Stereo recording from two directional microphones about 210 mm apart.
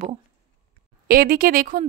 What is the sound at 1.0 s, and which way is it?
Speech, 45° right (ahead or behind).